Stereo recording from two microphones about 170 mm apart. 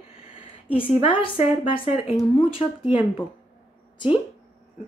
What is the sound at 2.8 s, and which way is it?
Speech, 10° right (ahead or behind).